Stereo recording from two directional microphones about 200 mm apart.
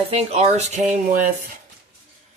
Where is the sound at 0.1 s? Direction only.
30° right (ahead or behind).